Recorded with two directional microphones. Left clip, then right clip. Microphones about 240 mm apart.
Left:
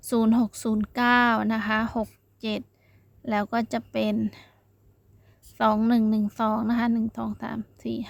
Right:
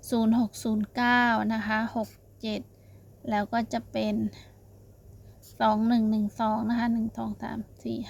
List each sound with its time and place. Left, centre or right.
0.0 s a woman's voice: left
5.5 s a woman's voice: left